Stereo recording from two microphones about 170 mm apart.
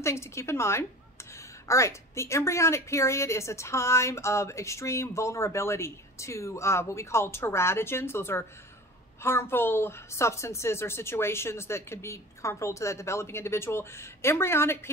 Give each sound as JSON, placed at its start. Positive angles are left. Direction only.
{"t": 0.0, "sound": "a woman's voice", "side_deg": 15}